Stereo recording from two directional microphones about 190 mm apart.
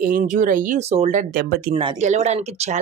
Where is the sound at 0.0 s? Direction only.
45° right (ahead or behind).